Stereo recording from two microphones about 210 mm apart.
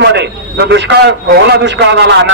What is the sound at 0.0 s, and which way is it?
A man's voice, 55° right (ahead or behind).